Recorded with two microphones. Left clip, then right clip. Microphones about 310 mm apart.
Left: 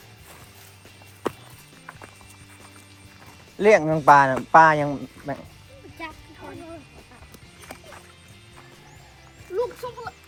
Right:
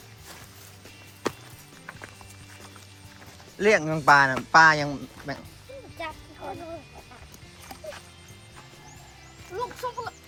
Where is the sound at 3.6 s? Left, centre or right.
Centre.